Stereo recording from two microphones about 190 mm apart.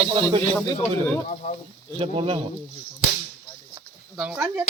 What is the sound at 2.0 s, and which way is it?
Speech, 30° right (ahead or behind).